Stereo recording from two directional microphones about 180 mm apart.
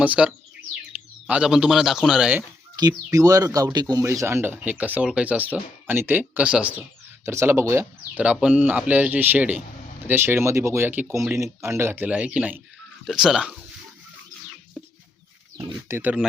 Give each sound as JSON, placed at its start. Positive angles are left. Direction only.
{"t": 0.0, "sound": "a man's voice", "side_deg": -5}
{"t": 2.7, "sound": "a man's voice", "side_deg": -20}
{"t": 15.5, "sound": "speech", "side_deg": -10}